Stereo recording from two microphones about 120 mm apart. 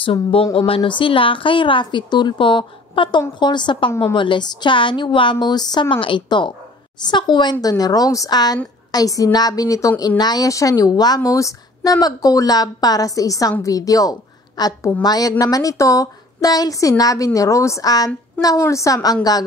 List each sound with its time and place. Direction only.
0.0 s a woman's voice: 50° left (ahead or behind); by 18.9 s 25° left (ahead or behind)